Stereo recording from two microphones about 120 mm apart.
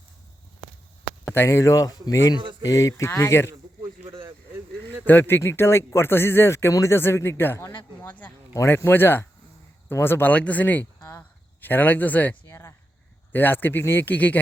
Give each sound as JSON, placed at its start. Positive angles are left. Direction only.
{"t": 1.3, "sound": "speech", "side_deg": 20}
{"t": 5.0, "sound": "a man's voice", "side_deg": 15}
{"t": 11.0, "sound": "a sound", "side_deg": 15}
{"t": 13.3, "sound": "speech", "side_deg": 15}